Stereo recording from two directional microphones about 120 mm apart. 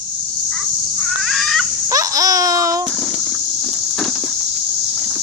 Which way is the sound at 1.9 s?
30° right (ahead or behind).